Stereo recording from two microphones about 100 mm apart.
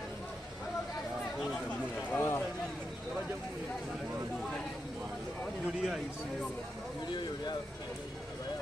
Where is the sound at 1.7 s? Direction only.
20° left (ahead or behind).